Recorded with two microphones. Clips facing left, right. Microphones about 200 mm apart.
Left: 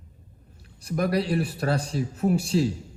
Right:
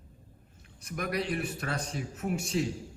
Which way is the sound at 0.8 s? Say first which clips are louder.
Left 8 dB; 30° left (ahead or behind).